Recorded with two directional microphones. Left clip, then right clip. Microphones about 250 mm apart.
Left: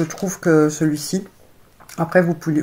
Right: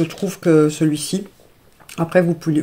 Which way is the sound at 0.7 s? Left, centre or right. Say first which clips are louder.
Right 1 dB; right.